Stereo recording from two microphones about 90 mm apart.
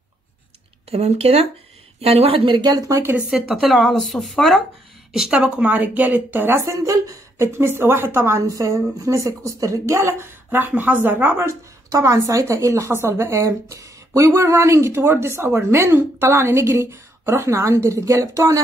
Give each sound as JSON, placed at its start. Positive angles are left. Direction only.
{"t": 2.0, "sound": "speech", "side_deg": -85}
{"t": 2.9, "sound": "speech", "side_deg": -30}
{"t": 3.3, "sound": "speech", "side_deg": -5}
{"t": 5.1, "sound": "speech", "side_deg": -10}
{"t": 6.6, "sound": "a woman's voice", "side_deg": -35}